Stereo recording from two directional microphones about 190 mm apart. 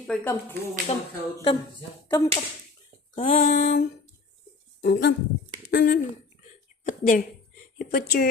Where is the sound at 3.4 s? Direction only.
45° left (ahead or behind).